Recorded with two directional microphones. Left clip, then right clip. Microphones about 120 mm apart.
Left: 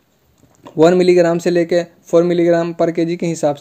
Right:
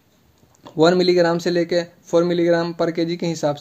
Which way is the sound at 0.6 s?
10° left (ahead or behind).